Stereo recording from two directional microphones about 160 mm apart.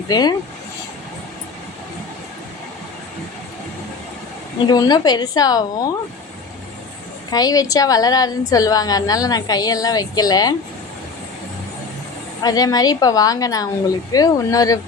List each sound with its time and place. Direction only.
0.1 s a woman's voice: 25° left (ahead or behind)
4.6 s a woman's voice: 25° left (ahead or behind)
7.3 s a woman's voice: 25° left (ahead or behind)
12.4 s a woman's voice: 25° left (ahead or behind)